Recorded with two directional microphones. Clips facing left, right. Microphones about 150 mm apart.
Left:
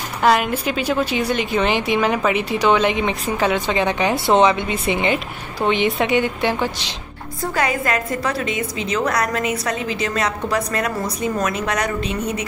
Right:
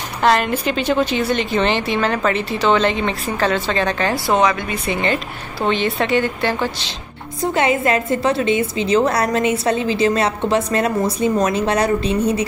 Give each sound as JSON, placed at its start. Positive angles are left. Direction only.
{"t": 0.2, "sound": "a woman's voice", "side_deg": 5}
{"t": 7.5, "sound": "a woman's voice", "side_deg": -25}